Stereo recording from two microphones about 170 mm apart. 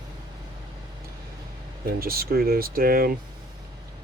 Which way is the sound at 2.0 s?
60° right (ahead or behind).